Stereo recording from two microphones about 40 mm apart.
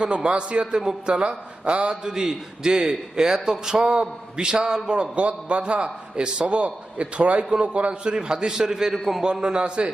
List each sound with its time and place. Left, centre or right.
0.0 s a man's voice: right
0.6 s a man's voice: centre
1.0 s a man's voice: right; by 9.2 s centre
9.2 s a man's voice: right